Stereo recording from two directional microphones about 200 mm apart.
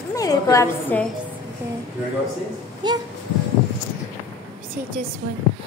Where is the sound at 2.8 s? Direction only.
20° right (ahead or behind).